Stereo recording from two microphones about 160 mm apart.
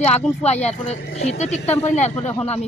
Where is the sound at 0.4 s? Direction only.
45° left (ahead or behind).